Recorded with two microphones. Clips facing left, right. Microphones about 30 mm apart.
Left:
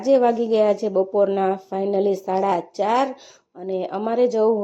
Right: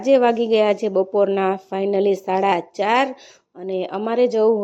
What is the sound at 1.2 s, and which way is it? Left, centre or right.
Speech, right.